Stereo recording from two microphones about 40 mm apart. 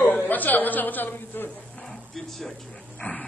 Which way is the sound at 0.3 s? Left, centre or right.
Left.